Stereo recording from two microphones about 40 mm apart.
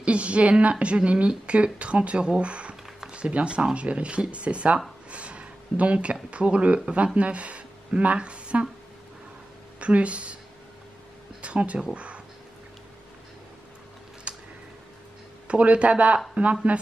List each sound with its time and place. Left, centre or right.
0.0 s a woman's voice: right
5.1 s a sound: right
6.3 s a woman's voice: right
9.8 s speech: right
11.4 s speech: right
14.3 s a sound: right
15.4 s a woman's voice: right